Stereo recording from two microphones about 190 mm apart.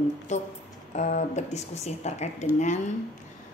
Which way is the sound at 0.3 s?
40° left (ahead or behind).